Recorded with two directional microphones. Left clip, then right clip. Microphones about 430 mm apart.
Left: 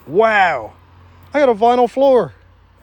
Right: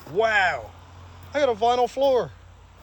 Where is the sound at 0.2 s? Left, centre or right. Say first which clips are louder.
Left 8 dB; centre.